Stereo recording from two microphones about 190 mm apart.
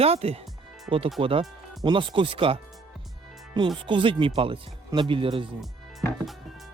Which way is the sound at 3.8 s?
25° right (ahead or behind).